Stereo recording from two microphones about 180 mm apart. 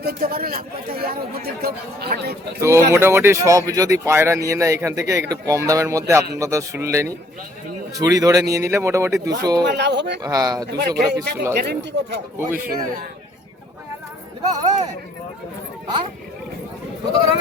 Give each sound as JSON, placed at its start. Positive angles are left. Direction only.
{"t": 0.0, "sound": "speech", "side_deg": -55}
{"t": 2.6, "sound": "a man's voice", "side_deg": -15}
{"t": 9.6, "sound": "speech", "side_deg": -70}
{"t": 10.2, "sound": "a man's voice", "side_deg": -20}
{"t": 10.7, "sound": "speech", "side_deg": -70}
{"t": 12.4, "sound": "speech", "side_deg": -15}
{"t": 12.6, "sound": "a man's voice", "side_deg": -50}